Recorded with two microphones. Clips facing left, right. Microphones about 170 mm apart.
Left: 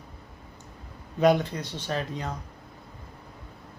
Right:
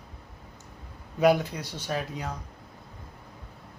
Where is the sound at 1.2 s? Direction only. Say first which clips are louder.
Left 1 dB; 5° right (ahead or behind).